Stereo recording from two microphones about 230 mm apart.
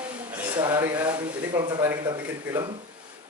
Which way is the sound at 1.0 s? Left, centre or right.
Centre.